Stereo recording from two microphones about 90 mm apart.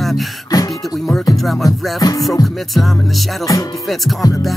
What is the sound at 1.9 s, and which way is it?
Music, 45° left (ahead or behind).